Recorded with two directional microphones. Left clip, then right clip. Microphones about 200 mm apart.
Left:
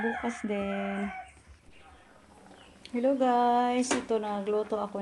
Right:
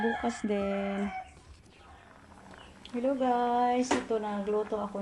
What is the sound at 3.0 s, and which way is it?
Speech, 20° left (ahead or behind).